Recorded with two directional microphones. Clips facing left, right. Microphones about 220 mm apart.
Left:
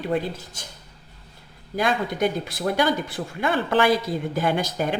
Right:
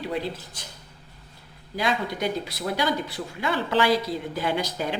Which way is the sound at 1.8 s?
50° left (ahead or behind).